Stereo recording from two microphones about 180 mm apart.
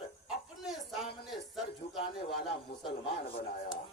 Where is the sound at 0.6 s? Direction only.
Centre (ahead or behind).